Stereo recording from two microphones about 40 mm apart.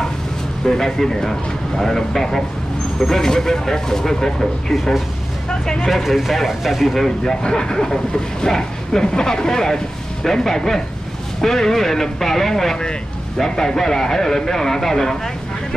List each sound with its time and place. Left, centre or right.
0.7 s speech: centre
5.9 s speech: centre
7.1 s speech: centre